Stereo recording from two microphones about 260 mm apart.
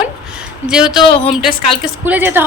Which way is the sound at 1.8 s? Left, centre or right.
Centre.